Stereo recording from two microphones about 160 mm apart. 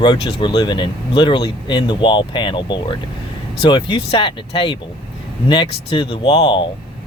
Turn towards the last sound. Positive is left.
turn(degrees=30)  # may be behind; listen again after turning